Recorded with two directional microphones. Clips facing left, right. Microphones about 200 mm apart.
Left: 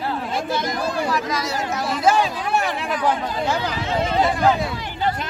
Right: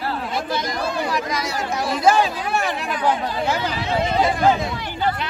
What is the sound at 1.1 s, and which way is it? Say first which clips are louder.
Speech: left 1 dB; 15° right (ahead or behind).